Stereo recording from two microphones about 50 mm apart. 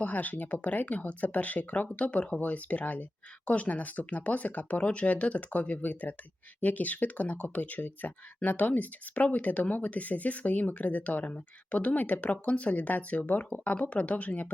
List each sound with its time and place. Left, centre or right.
0.0 s speech: left